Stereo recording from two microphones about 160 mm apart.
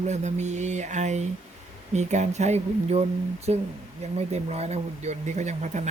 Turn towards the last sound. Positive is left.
turn(degrees=-50)  # may be behind; listen again after turning